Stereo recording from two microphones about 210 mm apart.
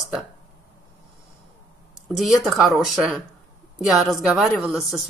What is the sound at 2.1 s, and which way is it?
A woman's voice, centre (ahead or behind).